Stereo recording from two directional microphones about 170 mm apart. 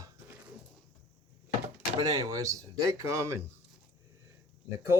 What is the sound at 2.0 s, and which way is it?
Speech, 20° right (ahead or behind).